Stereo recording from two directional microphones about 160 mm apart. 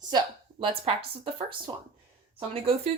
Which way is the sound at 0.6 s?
35° right (ahead or behind).